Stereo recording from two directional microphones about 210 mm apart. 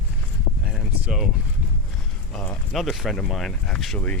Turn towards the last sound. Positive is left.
turn(degrees=5)  # may be behind; listen again after turning